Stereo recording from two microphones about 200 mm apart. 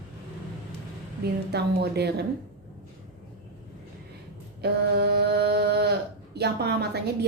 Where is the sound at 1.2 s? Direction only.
55° right (ahead or behind).